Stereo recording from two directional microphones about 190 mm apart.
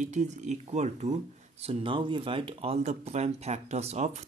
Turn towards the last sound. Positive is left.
turn(degrees=-35)  # may be behind; listen again after turning